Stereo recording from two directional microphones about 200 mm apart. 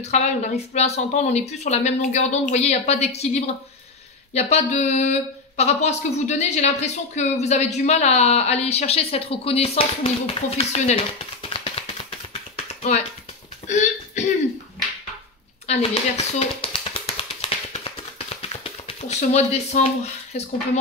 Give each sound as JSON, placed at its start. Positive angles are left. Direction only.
{"t": 0.0, "sound": "speech", "side_deg": 35}
{"t": 4.3, "sound": "speech", "side_deg": 30}
{"t": 11.4, "sound": "a sound", "side_deg": 30}
{"t": 15.6, "sound": "tap", "side_deg": 30}